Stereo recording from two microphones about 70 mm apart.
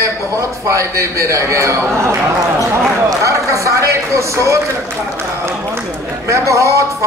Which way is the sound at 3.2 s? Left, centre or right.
Right.